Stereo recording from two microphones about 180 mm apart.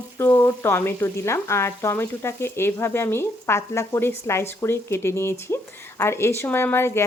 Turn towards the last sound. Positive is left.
turn(degrees=15)  # may be behind; listen again after turning